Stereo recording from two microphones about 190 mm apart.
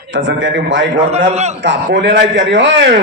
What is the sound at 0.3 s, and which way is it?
Speech, 80° right.